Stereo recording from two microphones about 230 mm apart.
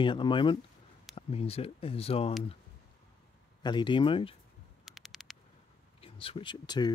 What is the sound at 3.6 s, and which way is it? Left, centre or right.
Speech, centre.